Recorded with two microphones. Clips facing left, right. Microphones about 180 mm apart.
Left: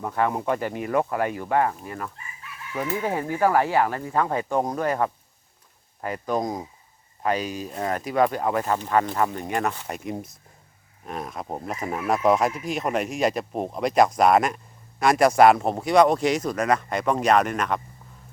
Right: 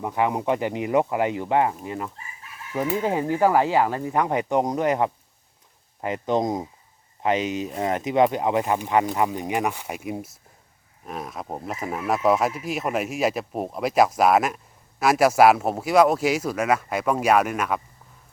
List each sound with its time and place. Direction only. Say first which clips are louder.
0.0 s speech: right 1 dB; 15° right (ahead or behind)